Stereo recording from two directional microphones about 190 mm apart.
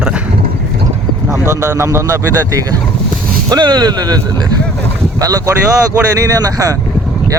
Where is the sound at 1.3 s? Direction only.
15° right (ahead or behind).